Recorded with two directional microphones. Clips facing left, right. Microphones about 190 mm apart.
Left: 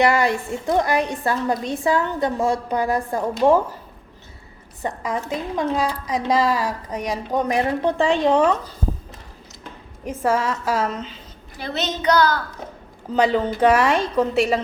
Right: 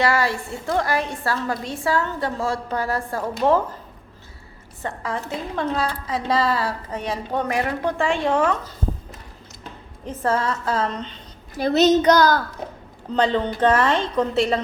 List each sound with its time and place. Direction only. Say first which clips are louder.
0.0 s a woman's voice: left 3 dB; 20° left (ahead or behind)
4.8 s a woman's voice: left 2 dB; 15° left (ahead or behind)
10.1 s a woman's voice: left 1 dB; 10° left (ahead or behind)
11.5 s speech: right 11 dB; 40° right (ahead or behind)
13.1 s a woman's voice: left 2 dB; 10° left (ahead or behind)